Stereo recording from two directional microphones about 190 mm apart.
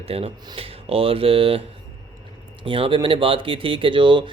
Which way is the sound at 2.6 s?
25° right (ahead or behind).